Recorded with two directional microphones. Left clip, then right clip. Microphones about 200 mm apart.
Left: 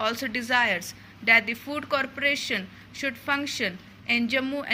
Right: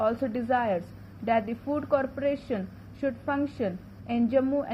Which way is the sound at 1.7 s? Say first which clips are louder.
Right 2 dB; 20° left (ahead or behind).